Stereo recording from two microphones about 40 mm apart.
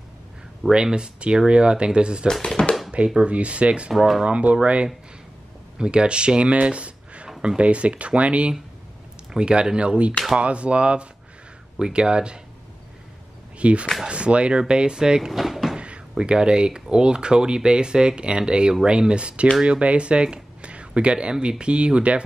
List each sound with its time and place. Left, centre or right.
0.7 s speech: centre
0.9 s speech: right
2.4 s a sound: left
3.2 s speech: right
13.6 s speech: right
15.3 s drawer open or close: centre
15.8 s speech: right